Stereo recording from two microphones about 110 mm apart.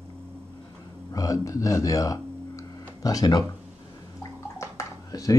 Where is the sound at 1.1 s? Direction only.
30° left (ahead or behind).